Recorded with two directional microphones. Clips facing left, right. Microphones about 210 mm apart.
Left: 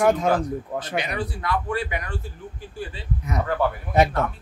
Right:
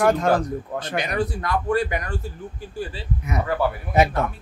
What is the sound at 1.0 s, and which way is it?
A man's voice, 45° right (ahead or behind).